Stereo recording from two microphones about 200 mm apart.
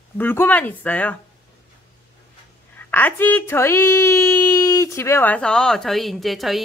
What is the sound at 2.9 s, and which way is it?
A woman's voice, 10° left (ahead or behind).